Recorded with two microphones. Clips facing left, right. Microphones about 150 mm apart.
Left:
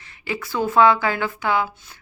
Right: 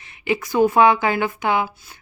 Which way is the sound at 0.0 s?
20° right (ahead or behind).